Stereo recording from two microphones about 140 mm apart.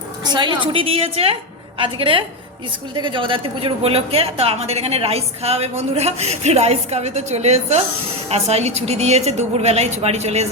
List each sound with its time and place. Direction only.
0.3 s a woman's voice: 35° right (ahead or behind); by 10.4 s 50° right (ahead or behind)